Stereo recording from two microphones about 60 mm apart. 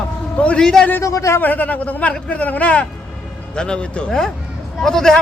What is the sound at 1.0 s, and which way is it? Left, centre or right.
Speech, left.